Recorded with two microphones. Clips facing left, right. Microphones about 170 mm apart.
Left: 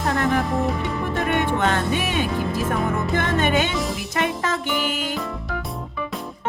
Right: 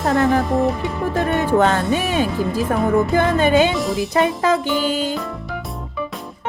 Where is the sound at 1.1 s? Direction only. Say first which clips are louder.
Right 5 dB; 35° right (ahead or behind).